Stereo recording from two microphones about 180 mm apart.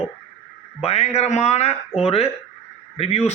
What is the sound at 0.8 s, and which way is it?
A man's voice, 35° left (ahead or behind).